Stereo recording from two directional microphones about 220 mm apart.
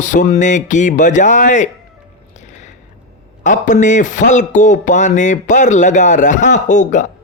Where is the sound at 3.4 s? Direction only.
35° left (ahead or behind).